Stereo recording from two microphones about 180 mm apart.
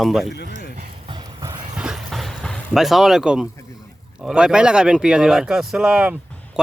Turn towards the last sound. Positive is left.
turn(degrees=-5)  # may be behind; listen again after turning